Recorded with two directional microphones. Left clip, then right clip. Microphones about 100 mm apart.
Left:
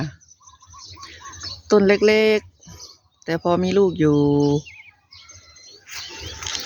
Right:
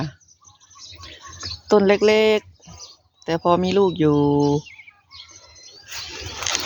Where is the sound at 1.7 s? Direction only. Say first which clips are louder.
Even; 35° left (ahead or behind).